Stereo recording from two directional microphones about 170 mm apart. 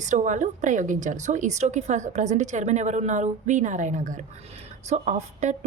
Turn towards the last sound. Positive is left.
turn(degrees=-45)  # may be behind; listen again after turning